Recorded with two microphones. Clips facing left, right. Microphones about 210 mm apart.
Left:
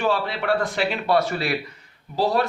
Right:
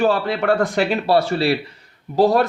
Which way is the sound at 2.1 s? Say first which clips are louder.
Right 6 dB; 45° right (ahead or behind).